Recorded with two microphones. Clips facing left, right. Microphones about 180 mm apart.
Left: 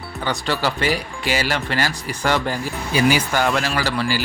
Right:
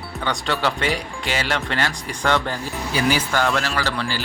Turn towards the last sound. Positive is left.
turn(degrees=10)  # may be behind; listen again after turning